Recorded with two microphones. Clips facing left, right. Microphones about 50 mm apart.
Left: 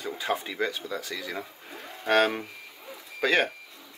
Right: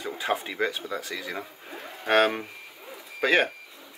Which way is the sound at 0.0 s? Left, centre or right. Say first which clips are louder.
Right 1 dB; centre.